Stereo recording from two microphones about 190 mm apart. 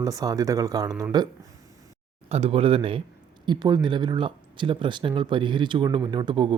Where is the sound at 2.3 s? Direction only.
30° right (ahead or behind).